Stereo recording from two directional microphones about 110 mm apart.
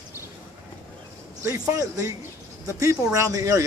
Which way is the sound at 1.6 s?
30° right (ahead or behind).